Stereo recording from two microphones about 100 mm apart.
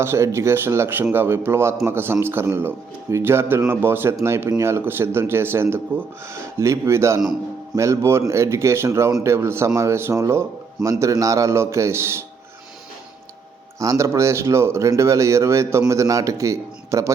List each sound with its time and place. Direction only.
0.0 s speech: 25° right (ahead or behind)
13.7 s a man's voice: 30° right (ahead or behind)